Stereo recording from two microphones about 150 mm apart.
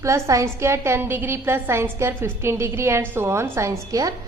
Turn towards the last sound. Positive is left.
turn(degrees=-25)  # may be behind; listen again after turning